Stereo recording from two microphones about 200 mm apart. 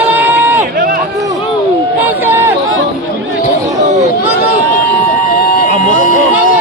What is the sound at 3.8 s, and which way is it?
Chatter, 35° right (ahead or behind).